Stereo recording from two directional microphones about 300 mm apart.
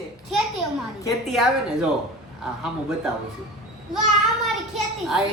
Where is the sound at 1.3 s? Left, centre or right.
Centre.